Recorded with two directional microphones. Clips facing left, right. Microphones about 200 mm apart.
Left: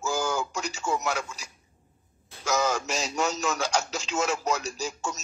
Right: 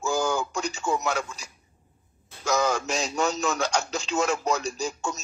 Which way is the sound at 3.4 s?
5° left (ahead or behind).